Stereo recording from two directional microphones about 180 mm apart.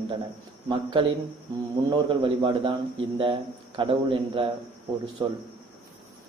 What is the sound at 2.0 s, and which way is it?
A man's voice, 30° right (ahead or behind).